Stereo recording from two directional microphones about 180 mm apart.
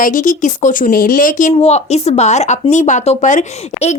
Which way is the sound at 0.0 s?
45° left (ahead or behind).